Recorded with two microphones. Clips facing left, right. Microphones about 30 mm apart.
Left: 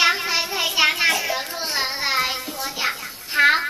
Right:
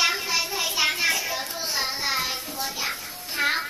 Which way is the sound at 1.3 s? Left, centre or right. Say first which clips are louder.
Left 3 dB; left.